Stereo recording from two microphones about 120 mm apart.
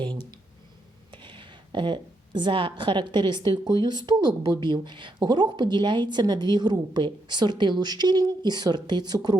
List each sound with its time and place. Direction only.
1.1 s a woman's voice: 40° right (ahead or behind)